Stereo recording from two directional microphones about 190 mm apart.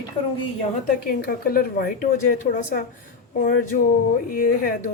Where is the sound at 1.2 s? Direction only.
50° left (ahead or behind).